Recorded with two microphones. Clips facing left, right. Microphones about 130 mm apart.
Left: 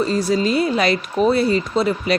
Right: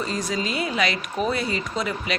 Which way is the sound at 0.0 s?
35° left (ahead or behind).